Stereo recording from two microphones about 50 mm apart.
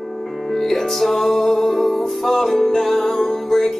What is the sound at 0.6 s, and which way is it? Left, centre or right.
Music, centre.